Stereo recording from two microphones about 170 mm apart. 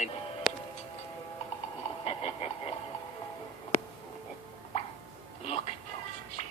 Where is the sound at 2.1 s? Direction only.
35° left (ahead or behind).